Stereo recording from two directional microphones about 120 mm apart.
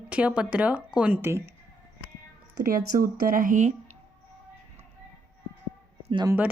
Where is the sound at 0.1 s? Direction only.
10° right (ahead or behind).